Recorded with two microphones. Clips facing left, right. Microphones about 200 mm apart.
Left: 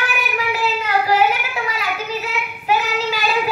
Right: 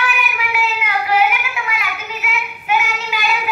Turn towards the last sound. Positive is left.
turn(degrees=35)  # may be behind; listen again after turning